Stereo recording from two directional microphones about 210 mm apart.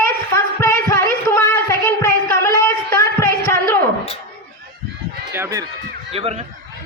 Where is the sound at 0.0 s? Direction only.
15° left (ahead or behind).